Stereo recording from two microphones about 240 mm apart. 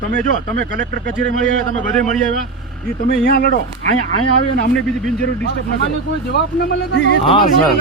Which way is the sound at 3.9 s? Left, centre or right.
Left.